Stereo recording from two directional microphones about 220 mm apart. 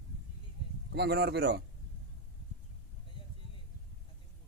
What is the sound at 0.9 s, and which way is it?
Speech, 50° right (ahead or behind).